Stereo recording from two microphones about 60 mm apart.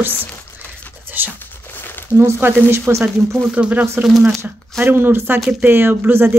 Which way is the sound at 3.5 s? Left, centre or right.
Right.